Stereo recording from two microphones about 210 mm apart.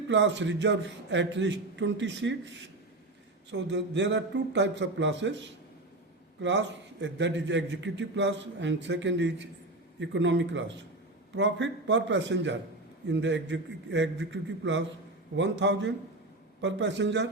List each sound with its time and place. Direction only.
0.1 s a man's voice: 60° right (ahead or behind)